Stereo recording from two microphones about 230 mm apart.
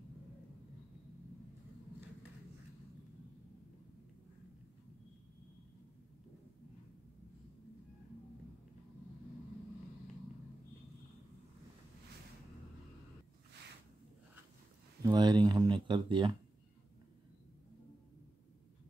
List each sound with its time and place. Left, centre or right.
15.0 s speech: centre